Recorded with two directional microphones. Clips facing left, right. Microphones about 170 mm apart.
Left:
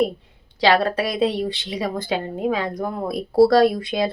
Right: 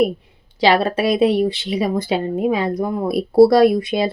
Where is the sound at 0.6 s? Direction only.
20° right (ahead or behind).